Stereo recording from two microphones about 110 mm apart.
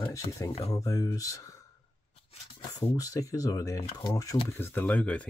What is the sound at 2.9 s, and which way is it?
Speech, 30° left (ahead or behind).